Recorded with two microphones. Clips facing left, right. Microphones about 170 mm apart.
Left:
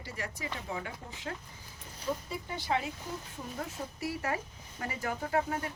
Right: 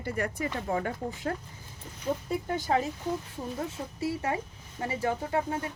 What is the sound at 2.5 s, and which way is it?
Speech, 45° right (ahead or behind).